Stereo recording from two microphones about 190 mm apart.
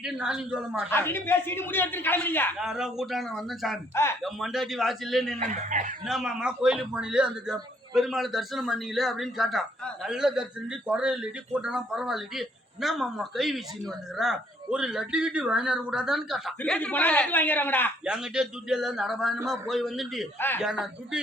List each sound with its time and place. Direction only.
0.0 s a man's voice: 5° right (ahead or behind)
0.9 s speech: 10° left (ahead or behind)
2.6 s a man's voice: centre (ahead or behind)
3.9 s speech: 15° left (ahead or behind)
4.2 s a man's voice: centre (ahead or behind)
5.4 s speech: 40° right (ahead or behind)
6.1 s a man's voice: centre (ahead or behind)
18.0 s a man's voice: 5° right (ahead or behind)